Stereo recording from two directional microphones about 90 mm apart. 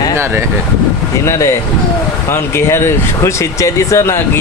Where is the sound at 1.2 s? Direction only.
35° left (ahead or behind).